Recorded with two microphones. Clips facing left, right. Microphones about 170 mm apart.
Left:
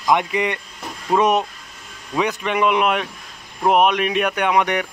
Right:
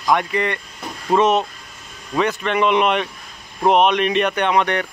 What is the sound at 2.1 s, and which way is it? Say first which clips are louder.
Speech: right 1 dB; 10° left (ahead or behind).